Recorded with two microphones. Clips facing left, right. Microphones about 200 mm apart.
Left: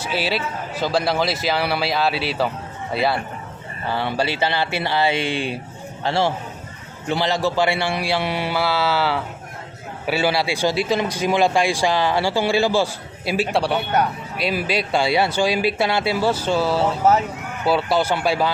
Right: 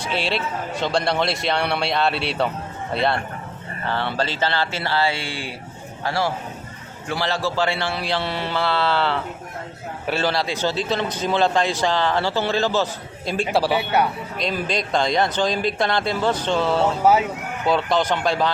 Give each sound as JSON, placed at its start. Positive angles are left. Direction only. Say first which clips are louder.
{"t": 0.0, "sound": "a man's voice", "louder": "left 1 dB", "side_deg": 5}
{"t": 14.3, "sound": "a man's voice", "louder": "left 3 dB", "side_deg": 5}